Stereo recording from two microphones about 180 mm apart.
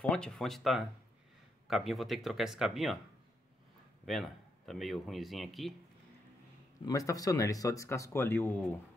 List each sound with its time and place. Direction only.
0.0 s a man's voice: 5° left (ahead or behind)
4.0 s a man's voice: centre (ahead or behind)
6.9 s speech: 20° left (ahead or behind)